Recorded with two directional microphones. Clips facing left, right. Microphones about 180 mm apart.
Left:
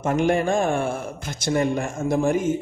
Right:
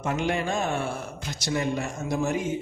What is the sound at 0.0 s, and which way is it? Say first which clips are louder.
A man's voice: left 6 dB; 50° left (ahead or behind).